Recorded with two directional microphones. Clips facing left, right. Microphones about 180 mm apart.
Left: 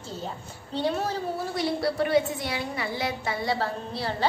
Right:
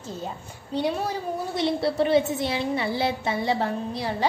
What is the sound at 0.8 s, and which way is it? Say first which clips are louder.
A woman's voice: right 1 dB; 10° right (ahead or behind).